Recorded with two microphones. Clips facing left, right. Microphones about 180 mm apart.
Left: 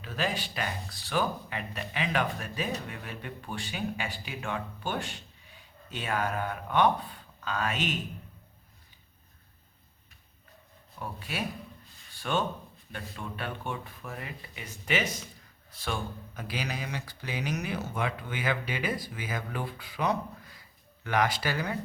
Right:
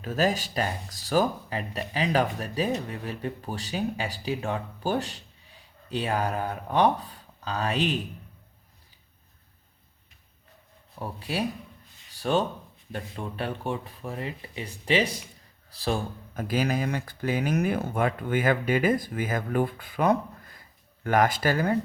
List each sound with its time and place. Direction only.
0.0 s speech: 45° right (ahead or behind)
11.0 s speech: 35° right (ahead or behind)
16.3 s speech: 45° right (ahead or behind)